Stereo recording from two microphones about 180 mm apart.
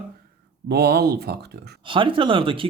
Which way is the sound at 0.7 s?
60° right (ahead or behind).